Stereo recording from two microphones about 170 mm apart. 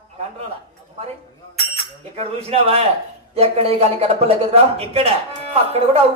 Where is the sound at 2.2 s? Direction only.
35° right (ahead or behind).